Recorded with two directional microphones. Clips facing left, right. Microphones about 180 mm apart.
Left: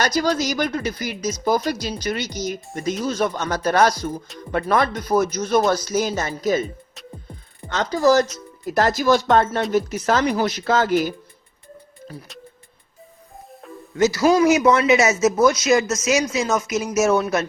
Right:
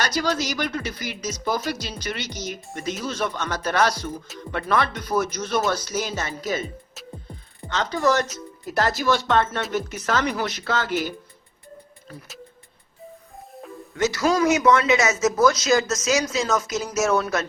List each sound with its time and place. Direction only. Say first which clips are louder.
0.0 s speech: left 4 dB; 45° left (ahead or behind)
7.7 s speech: left 5 dB; 40° left (ahead or behind)
13.9 s speech: left 5 dB; 30° left (ahead or behind)